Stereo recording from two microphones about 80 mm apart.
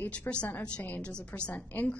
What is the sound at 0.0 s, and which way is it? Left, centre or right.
A woman's voice, centre.